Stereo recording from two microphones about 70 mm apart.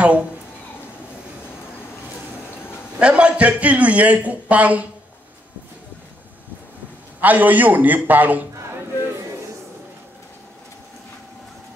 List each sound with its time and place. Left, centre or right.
0.0 s a woman's voice: centre
3.0 s a man's voice: centre
7.2 s a man's voice: right